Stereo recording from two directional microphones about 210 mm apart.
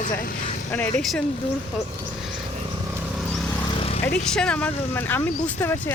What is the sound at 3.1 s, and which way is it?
Vehicle, 5° left (ahead or behind).